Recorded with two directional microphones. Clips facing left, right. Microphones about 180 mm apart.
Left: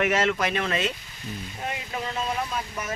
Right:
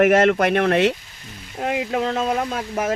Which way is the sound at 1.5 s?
75° right (ahead or behind).